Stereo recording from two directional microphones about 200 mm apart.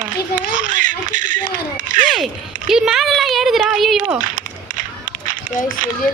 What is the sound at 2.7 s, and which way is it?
Speech, 5° right (ahead or behind).